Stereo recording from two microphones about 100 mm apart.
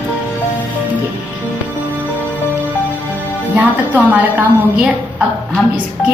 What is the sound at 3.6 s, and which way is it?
A woman's voice, 15° right (ahead or behind).